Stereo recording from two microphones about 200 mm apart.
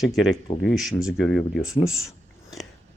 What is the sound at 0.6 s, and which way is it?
Speech, centre (ahead or behind).